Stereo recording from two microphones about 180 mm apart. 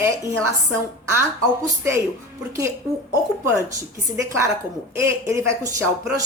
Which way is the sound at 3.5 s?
15° right (ahead or behind).